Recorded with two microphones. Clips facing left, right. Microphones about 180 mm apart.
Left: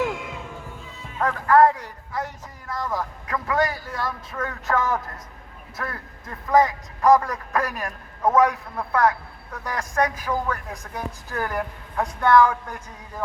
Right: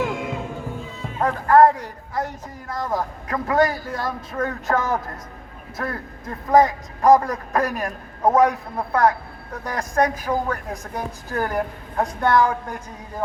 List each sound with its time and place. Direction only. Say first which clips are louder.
1.2 s a man's voice: right 2 dB; 35° right (ahead or behind)